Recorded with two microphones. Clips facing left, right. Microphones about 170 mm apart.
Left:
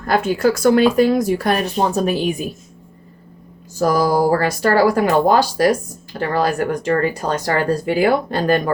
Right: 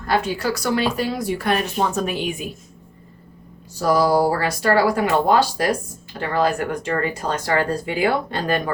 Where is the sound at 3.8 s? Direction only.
45° left (ahead or behind).